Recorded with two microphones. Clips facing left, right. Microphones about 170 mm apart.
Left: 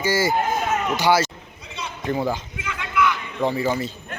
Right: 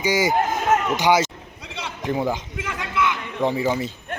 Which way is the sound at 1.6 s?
90° right.